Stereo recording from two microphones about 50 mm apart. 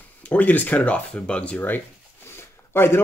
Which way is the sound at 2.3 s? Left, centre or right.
Left.